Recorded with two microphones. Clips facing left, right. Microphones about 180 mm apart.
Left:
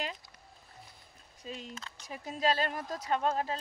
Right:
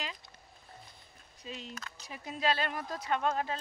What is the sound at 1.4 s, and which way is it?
Speech, 45° left (ahead or behind).